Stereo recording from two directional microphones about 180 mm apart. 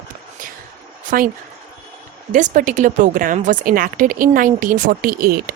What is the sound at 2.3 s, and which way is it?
A woman's voice, 45° right (ahead or behind).